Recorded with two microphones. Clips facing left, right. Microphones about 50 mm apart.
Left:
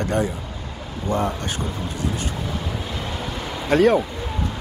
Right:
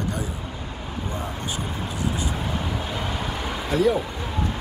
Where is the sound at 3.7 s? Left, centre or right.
Left.